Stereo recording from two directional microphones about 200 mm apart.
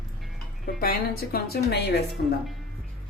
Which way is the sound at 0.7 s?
50° left (ahead or behind).